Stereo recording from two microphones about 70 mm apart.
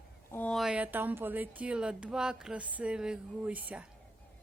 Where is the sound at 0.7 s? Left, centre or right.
Right.